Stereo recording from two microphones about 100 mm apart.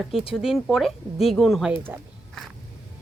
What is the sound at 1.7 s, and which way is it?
Speech, 20° right (ahead or behind).